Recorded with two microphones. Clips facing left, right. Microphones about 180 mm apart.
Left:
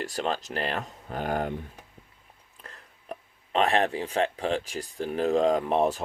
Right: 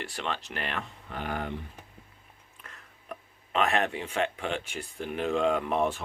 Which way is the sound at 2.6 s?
35° left (ahead or behind).